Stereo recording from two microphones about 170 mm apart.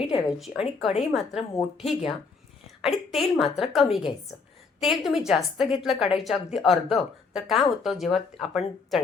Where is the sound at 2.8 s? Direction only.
Centre (ahead or behind).